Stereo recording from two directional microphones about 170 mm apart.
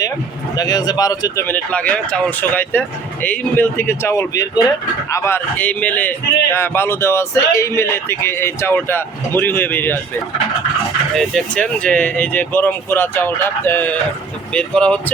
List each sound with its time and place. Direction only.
0.5 s speech: 20° left (ahead or behind)
1.5 s a man's voice: 10° left (ahead or behind)
11.1 s a man's voice: centre (ahead or behind)